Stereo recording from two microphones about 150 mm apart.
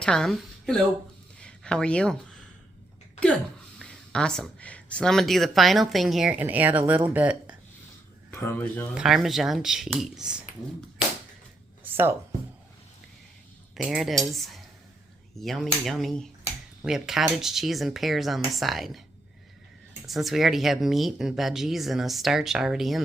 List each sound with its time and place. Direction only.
0.0 s speech: 5° left (ahead or behind)
1.4 s a sound: 5° left (ahead or behind)
3.8 s speech: 5° left (ahead or behind); by 7.5 s 10° right (ahead or behind)
8.4 s speech: 15° left (ahead or behind)
9.0 s speech: centre (ahead or behind)
11.8 s music: 15° right (ahead or behind)
13.8 s speech: centre (ahead or behind)
20.1 s speech: centre (ahead or behind)